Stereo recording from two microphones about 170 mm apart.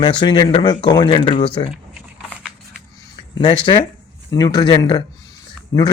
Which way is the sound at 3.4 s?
30° left (ahead or behind).